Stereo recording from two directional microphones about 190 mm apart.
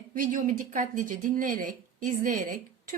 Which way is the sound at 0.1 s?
45° right (ahead or behind).